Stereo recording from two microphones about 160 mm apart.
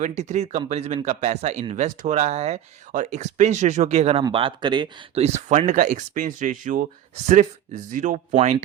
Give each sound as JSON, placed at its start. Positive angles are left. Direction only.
{"t": 0.0, "sound": "speech", "side_deg": -45}